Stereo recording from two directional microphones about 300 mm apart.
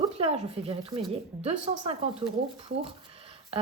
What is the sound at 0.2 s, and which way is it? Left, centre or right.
Speech, centre.